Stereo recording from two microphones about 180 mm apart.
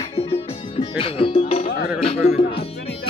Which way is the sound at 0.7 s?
30° left (ahead or behind).